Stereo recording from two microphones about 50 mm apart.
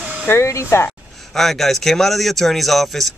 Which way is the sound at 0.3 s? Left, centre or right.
Left.